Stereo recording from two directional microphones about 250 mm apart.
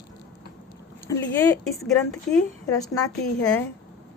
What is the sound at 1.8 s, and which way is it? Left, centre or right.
Speech, centre.